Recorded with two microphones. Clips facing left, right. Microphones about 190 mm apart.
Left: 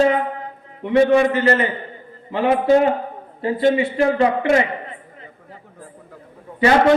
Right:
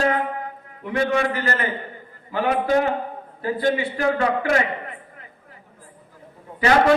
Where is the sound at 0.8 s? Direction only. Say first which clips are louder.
Left 8 dB; 25° left (ahead or behind).